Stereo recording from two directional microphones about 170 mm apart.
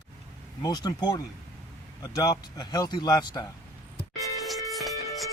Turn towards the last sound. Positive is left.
turn(degrees=0)  # may be behind; listen again after turning